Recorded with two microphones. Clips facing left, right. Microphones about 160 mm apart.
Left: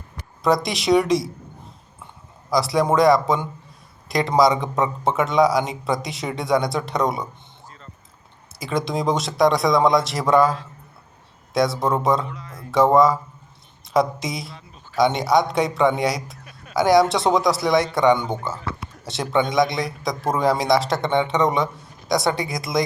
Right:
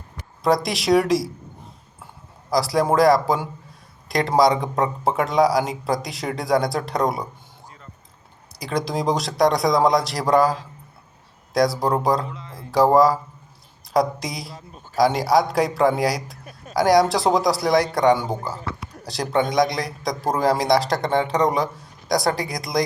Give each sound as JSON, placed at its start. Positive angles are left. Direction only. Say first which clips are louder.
{"t": 0.4, "sound": "a man's voice", "louder": "even", "side_deg": 0}
{"t": 2.5, "sound": "a man's voice", "louder": "even", "side_deg": 0}
{"t": 8.5, "sound": "a man's voice", "louder": "left 1 dB", "side_deg": 0}
{"t": 12.2, "sound": "a sound", "louder": "even", "side_deg": -25}
{"t": 12.7, "sound": "a man's voice", "louder": "even", "side_deg": 0}